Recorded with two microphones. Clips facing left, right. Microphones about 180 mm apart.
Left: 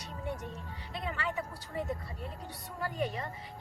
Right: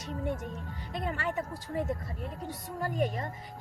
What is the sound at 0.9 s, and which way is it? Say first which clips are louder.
A woman's voice: right 3 dB; 45° right (ahead or behind).